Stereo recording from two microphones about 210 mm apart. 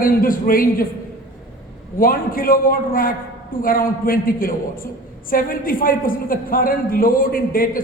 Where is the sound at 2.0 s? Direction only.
40° left (ahead or behind).